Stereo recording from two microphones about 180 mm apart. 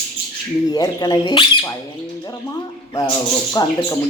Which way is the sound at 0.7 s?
20° left (ahead or behind).